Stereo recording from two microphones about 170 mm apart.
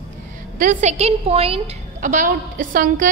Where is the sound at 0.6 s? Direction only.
45° right (ahead or behind).